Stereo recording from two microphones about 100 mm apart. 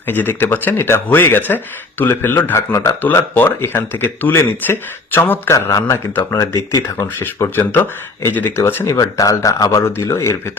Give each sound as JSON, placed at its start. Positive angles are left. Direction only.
{"t": 0.0, "sound": "speech", "side_deg": 20}
{"t": 5.5, "sound": "speech", "side_deg": 30}
{"t": 9.0, "sound": "speech", "side_deg": 35}